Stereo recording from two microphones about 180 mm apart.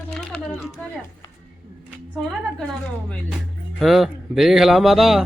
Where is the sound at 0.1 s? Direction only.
5° left (ahead or behind).